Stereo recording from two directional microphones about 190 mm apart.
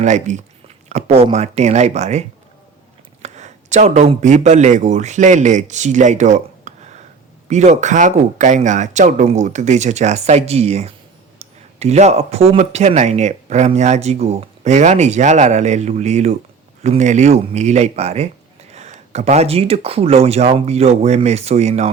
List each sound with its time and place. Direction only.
0.0 s speech: 40° right (ahead or behind)